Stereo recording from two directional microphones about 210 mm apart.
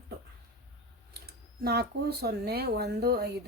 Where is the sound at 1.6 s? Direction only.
50° right (ahead or behind).